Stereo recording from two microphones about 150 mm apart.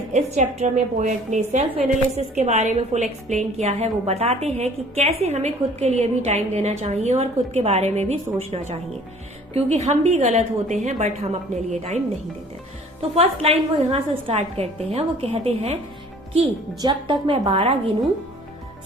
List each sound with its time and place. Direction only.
0.1 s a woman's voice: 50° right (ahead or behind)
13.0 s a woman's voice: 40° right (ahead or behind)
16.8 s a woman's voice: 35° right (ahead or behind)